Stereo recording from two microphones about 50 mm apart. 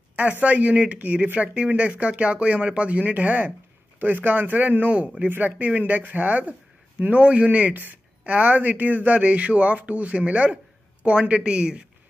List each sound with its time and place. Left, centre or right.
0.1 s a man's voice: right
7.2 s a man's voice: right